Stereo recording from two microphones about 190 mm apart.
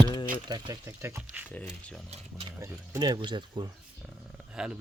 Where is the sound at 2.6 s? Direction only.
20° right (ahead or behind).